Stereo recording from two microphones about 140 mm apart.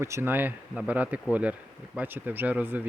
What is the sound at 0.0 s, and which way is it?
Speech, 20° right (ahead or behind).